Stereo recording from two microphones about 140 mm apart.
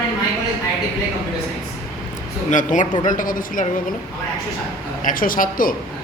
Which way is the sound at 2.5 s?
65° left (ahead or behind).